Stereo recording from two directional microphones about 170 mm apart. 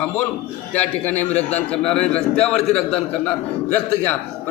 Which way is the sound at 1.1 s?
40° left (ahead or behind).